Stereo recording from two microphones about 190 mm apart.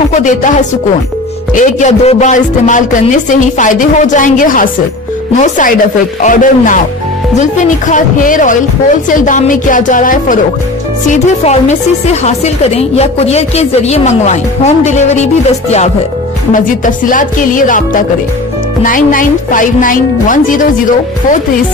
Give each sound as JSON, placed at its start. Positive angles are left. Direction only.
{"t": 0.1, "sound": "speech", "side_deg": 40}
{"t": 16.5, "sound": "speech", "side_deg": 45}